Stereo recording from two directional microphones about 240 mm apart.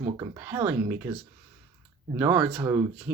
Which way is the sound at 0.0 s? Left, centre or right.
Centre.